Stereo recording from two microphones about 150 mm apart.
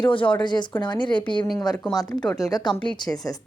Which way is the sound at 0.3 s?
30° left (ahead or behind).